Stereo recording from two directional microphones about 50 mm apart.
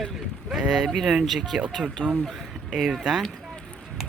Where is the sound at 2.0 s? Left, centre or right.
Right.